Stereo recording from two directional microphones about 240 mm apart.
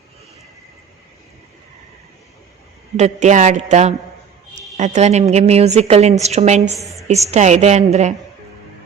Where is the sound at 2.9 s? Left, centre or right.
Right.